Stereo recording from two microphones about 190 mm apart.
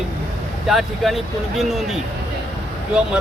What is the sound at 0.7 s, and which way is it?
Speech, centre (ahead or behind).